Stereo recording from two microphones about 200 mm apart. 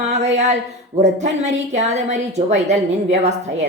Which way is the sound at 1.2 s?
35° right (ahead or behind).